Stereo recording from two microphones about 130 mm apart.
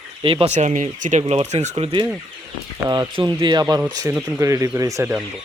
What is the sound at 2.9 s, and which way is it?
Speech, 35° right (ahead or behind).